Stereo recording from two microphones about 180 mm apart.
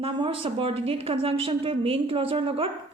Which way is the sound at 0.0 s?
30° right (ahead or behind).